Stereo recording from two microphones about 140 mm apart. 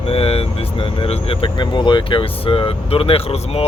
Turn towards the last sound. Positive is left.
turn(degrees=45)  # may be behind; listen again after turning